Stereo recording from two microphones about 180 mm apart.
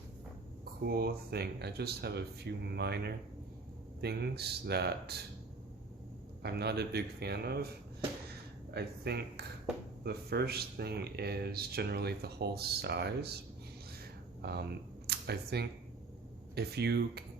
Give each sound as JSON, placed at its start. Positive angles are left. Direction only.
{"t": 0.6, "sound": "speech", "side_deg": -55}
{"t": 6.4, "sound": "speech", "side_deg": -65}
{"t": 8.7, "sound": "speech", "side_deg": -65}
{"t": 14.4, "sound": "speech", "side_deg": -65}